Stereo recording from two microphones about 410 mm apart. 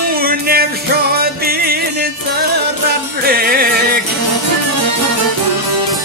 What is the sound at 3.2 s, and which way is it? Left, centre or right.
Music, right.